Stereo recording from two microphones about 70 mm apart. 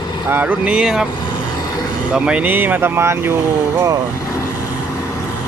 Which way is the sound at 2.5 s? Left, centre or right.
Right.